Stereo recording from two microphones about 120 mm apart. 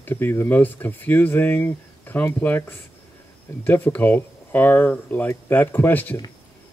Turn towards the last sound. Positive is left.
turn(degrees=15)  # may be behind; listen again after turning